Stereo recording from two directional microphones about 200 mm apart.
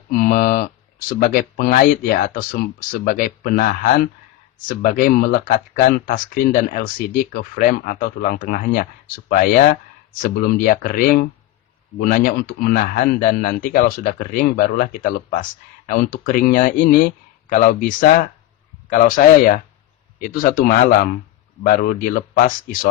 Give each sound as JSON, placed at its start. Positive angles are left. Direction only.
{"t": 0.1, "sound": "a man's voice", "side_deg": 45}